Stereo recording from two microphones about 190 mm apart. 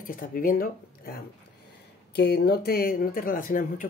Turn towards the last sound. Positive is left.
turn(degrees=45)  # may be behind; listen again after turning